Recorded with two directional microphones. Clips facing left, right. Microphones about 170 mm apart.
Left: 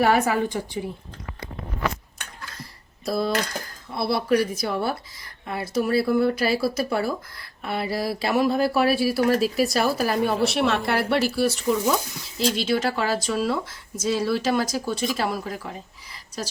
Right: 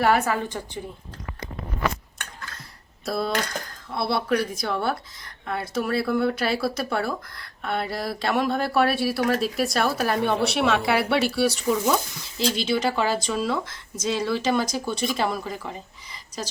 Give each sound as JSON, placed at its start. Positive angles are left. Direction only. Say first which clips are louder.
{"t": 0.0, "sound": "a woman's voice", "louder": "left 2 dB", "side_deg": 15}
{"t": 3.1, "sound": "speech", "louder": "left 2 dB", "side_deg": 0}